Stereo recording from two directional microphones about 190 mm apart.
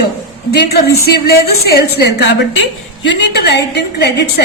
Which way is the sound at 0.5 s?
55° left (ahead or behind).